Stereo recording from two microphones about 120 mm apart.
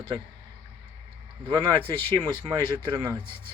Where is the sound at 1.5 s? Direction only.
40° right (ahead or behind).